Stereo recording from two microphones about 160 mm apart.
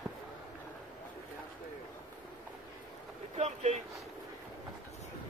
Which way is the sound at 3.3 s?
45° right (ahead or behind).